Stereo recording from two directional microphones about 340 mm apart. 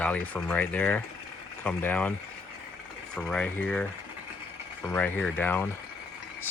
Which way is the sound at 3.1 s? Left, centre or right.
Centre.